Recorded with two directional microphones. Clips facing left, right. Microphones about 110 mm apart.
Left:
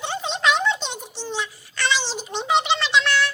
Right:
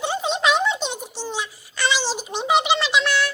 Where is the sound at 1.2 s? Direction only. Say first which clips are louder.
Left 1 dB; 10° right (ahead or behind).